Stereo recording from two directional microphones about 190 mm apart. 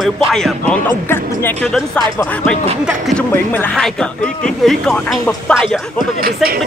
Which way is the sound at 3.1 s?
5° left (ahead or behind).